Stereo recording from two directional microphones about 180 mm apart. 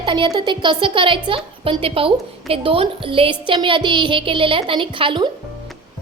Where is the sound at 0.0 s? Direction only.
25° right (ahead or behind).